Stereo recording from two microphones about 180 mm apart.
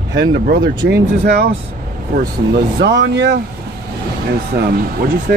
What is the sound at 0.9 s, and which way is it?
Speech, 65° right (ahead or behind).